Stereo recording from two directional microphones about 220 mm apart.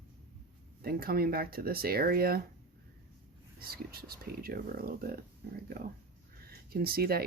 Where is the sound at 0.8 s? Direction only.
45° right (ahead or behind).